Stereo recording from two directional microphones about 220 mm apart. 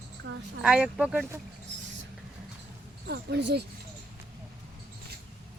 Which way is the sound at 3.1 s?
50° right (ahead or behind).